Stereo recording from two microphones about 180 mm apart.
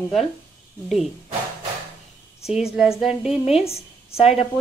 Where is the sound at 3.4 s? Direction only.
35° left (ahead or behind).